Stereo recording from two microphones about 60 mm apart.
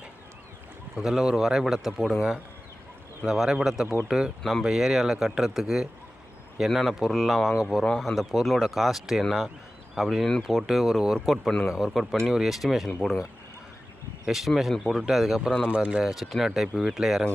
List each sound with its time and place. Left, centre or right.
1.0 s speech: centre
3.2 s speech: centre
14.3 s speech: centre
15.6 s speech: centre
16.1 s speech: centre